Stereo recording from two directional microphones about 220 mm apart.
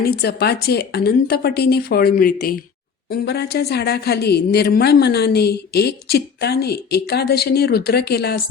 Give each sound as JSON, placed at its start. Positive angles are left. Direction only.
{"t": 0.0, "sound": "a woman's voice", "side_deg": 45}